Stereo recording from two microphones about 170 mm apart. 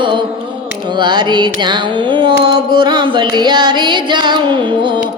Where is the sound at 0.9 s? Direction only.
25° right (ahead or behind).